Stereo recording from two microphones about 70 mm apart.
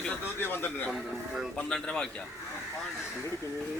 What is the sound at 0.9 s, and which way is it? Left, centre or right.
Speech, centre.